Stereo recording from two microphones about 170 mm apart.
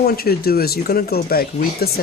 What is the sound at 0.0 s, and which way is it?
Speech, 65° left (ahead or behind).